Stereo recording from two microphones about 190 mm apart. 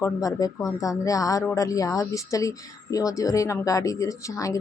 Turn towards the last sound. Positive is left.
turn(degrees=15)  # may be behind; listen again after turning